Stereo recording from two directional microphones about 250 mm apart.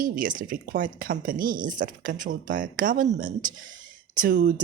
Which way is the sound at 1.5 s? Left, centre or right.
Centre.